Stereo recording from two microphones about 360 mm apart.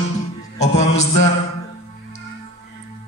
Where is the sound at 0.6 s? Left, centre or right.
Centre.